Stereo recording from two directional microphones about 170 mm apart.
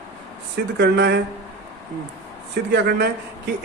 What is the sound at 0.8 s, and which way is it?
Speech, 85° right.